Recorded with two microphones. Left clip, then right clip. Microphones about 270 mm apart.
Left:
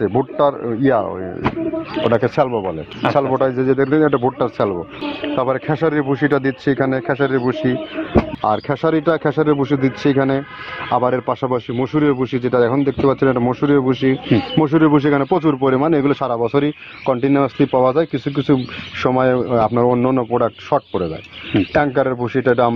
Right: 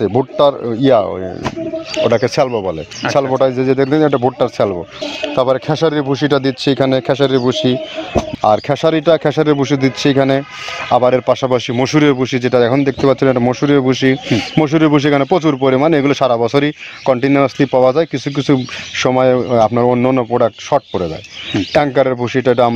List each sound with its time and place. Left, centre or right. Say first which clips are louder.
0.0 s speech: right 4 dB; right